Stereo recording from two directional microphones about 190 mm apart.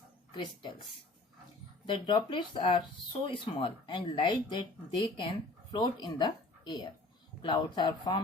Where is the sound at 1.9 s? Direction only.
25° left (ahead or behind).